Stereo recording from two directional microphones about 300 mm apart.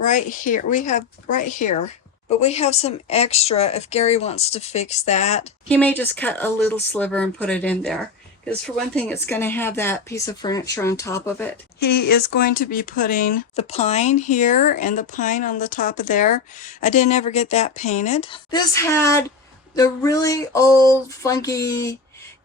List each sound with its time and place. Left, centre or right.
0.0 s speech: left
5.6 s speech: centre
11.8 s speech: left; by 21.9 s centre